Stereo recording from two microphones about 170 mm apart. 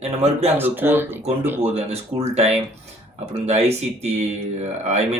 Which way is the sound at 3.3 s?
40° right (ahead or behind).